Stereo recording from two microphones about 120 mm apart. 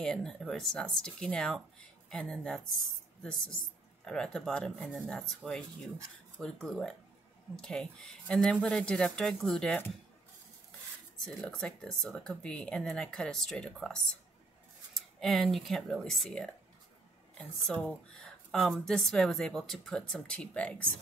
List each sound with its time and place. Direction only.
0.0 s speech: 5° left (ahead or behind)
11.1 s speech: 5° left (ahead or behind)
15.0 s a sound: centre (ahead or behind)
15.5 s speech: centre (ahead or behind)